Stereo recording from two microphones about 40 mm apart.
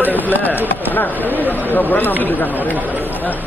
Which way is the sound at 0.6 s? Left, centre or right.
Left.